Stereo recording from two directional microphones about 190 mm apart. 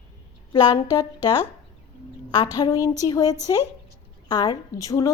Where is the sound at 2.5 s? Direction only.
20° left (ahead or behind).